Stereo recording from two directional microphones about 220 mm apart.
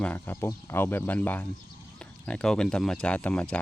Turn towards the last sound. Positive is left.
turn(degrees=5)  # may be behind; listen again after turning